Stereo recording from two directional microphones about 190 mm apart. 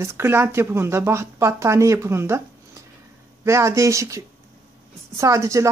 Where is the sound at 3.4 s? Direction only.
15° right (ahead or behind).